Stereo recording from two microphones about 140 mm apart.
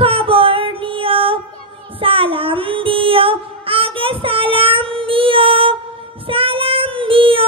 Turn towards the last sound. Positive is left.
turn(degrees=-40)  # may be behind; listen again after turning